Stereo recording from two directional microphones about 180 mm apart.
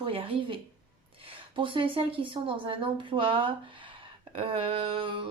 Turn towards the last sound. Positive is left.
turn(degrees=-30)  # may be behind; listen again after turning